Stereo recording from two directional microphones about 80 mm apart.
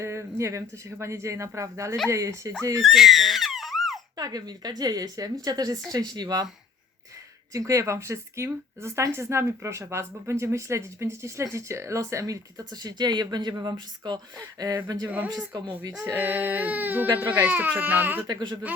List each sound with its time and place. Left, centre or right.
0.0 s speech: right
2.8 s a sound: centre
4.2 s speech: right
7.5 s speech: right
16.1 s speech: right
17.5 s speech: centre
18.3 s speech: right